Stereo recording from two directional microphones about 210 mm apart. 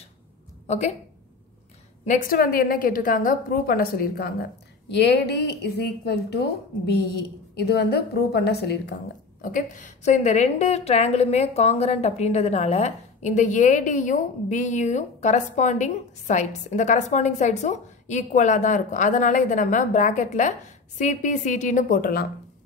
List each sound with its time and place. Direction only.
0.7 s a woman's voice: 30° left (ahead or behind)
2.0 s a woman's voice: 40° left (ahead or behind)
9.4 s a woman's voice: 40° left (ahead or behind)